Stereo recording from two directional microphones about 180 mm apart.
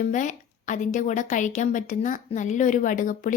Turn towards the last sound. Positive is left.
turn(degrees=45)  # may be behind; listen again after turning